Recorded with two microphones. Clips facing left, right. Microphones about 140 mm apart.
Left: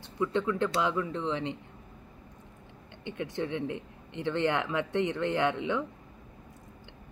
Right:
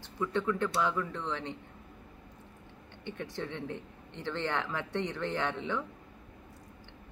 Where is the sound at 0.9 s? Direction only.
20° left (ahead or behind).